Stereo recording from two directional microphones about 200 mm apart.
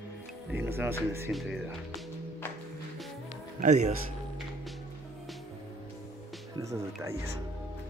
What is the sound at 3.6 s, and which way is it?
Speech, 35° right (ahead or behind).